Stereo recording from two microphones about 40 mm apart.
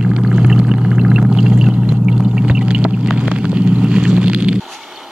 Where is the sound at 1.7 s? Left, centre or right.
Right.